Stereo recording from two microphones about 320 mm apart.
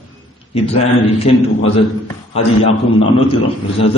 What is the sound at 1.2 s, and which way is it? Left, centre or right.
A man's voice, centre.